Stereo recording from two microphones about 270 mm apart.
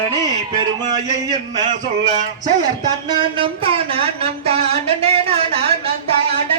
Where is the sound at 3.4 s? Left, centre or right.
Right.